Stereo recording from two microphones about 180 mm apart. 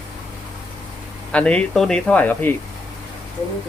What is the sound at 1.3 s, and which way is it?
Speech, 5° left (ahead or behind).